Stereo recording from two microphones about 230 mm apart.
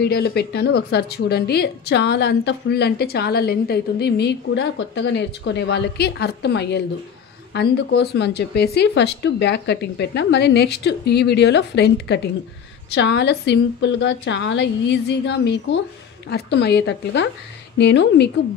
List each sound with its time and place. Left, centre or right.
0.0 s a woman's voice: left